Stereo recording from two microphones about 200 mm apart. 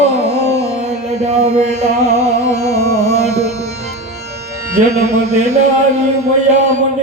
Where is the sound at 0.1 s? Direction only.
35° right (ahead or behind).